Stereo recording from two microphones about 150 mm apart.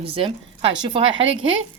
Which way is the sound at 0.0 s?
35° right (ahead or behind).